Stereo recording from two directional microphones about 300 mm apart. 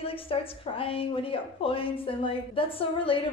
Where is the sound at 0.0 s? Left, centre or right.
Centre.